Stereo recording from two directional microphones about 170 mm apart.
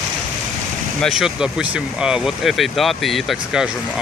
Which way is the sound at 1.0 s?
Centre (ahead or behind).